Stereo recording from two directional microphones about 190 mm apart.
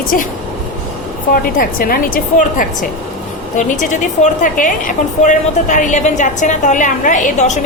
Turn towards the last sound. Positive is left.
turn(degrees=40)  # may be behind; listen again after turning